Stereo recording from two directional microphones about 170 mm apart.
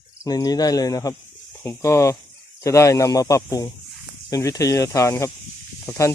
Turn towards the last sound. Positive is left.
turn(degrees=15)  # may be behind; listen again after turning